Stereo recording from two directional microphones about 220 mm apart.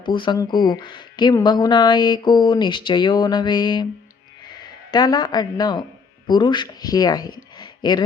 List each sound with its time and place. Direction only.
0.0 s speech: 20° left (ahead or behind)
4.9 s speech: 20° left (ahead or behind)
7.6 s a sound: 20° left (ahead or behind)